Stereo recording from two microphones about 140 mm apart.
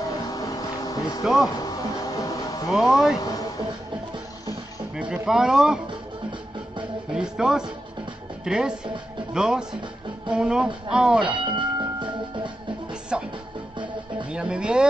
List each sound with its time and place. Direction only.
0.0 s vehicle: 25° left (ahead or behind)
1.2 s speech: centre (ahead or behind)
1.6 s music: 25° left (ahead or behind)
2.7 s speech: centre (ahead or behind)
4.9 s speech: 5° right (ahead or behind)
7.1 s speech: 5° right (ahead or behind)
11.4 s music: 35° right (ahead or behind)
13.1 s music: 5° right (ahead or behind)
14.3 s speech: 5° right (ahead or behind)